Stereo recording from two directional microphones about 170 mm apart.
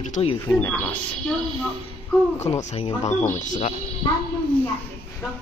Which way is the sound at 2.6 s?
40° left (ahead or behind).